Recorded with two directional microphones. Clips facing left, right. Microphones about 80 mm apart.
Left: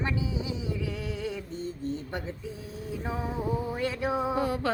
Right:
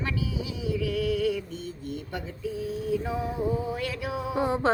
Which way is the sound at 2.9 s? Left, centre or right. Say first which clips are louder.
Right 3 dB; left.